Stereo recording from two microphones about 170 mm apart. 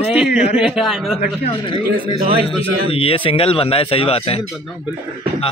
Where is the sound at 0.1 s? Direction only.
5° right (ahead or behind).